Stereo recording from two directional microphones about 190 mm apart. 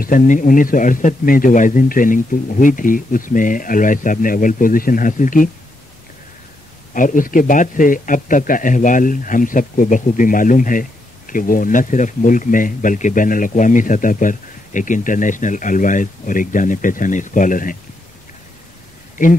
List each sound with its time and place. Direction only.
0.0 s a man's voice: 45° left (ahead or behind)
6.9 s a man's voice: 45° left (ahead or behind)